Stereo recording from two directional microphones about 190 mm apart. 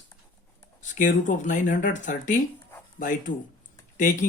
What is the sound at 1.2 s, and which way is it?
Speech, 40° left (ahead or behind).